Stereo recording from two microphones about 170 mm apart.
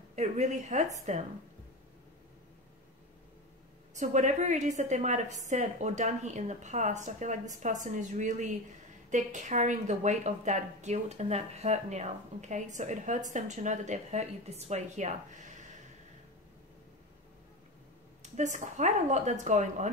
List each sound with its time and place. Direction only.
0.1 s a woman's voice: 45° right (ahead or behind)
3.9 s a woman's voice: 45° right (ahead or behind)
18.2 s a woman's voice: 45° right (ahead or behind)